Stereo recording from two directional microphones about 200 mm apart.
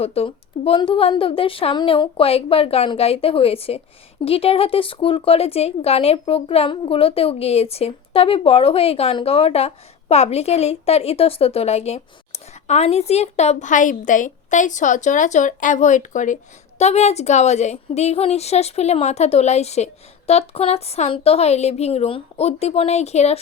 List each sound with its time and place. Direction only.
0.0 s a woman's voice: 30° left (ahead or behind)